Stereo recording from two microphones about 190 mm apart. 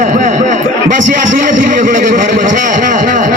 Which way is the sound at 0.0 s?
40° right (ahead or behind).